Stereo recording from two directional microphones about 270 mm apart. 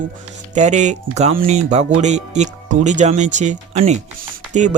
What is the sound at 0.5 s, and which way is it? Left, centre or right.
Speech, right.